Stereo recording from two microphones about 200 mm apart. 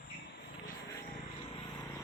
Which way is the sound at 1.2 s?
25° left (ahead or behind).